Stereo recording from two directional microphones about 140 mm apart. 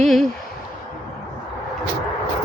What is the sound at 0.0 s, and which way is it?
Speech, centre (ahead or behind).